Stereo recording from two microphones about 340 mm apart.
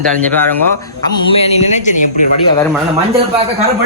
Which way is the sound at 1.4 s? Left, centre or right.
Centre.